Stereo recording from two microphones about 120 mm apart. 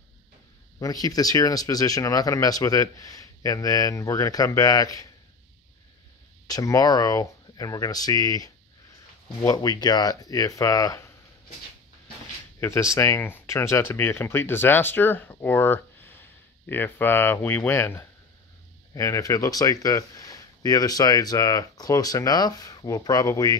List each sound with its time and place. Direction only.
0.7 s speech: 30° left (ahead or behind)
6.4 s speech: 30° left (ahead or behind)
12.5 s speech: 20° left (ahead or behind)